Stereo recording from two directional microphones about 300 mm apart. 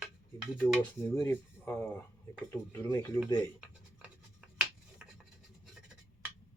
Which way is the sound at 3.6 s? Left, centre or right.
Centre.